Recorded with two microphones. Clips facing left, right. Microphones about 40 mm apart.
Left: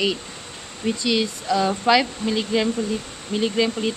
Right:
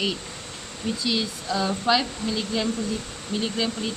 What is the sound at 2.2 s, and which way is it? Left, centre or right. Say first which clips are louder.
Speech: left 5 dB; left.